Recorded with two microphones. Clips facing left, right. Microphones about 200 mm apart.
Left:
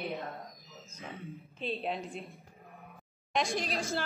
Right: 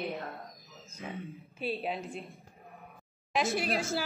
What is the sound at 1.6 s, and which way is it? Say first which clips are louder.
Speech: right 1 dB; centre (ahead or behind).